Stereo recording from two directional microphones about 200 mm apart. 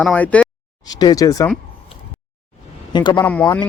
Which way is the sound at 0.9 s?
20° left (ahead or behind).